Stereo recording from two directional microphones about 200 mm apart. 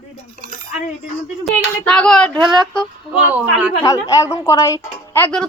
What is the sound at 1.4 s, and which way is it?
Speech, 5° left (ahead or behind).